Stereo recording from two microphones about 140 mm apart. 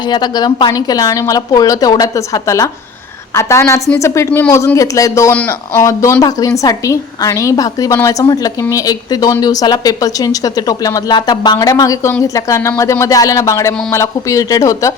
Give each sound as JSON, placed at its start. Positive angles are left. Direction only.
{"t": 0.1, "sound": "speech", "side_deg": 30}